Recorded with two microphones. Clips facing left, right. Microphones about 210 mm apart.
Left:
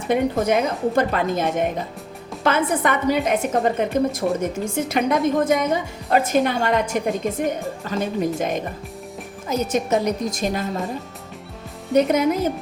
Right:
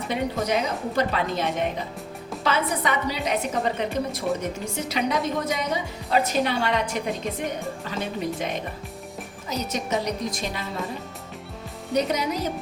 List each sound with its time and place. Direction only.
0.1 s a woman's voice: 50° left (ahead or behind)
11.9 s a woman's voice: 50° left (ahead or behind)